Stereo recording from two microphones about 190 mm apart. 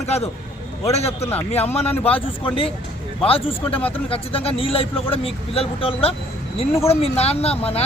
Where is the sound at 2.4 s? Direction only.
25° left (ahead or behind).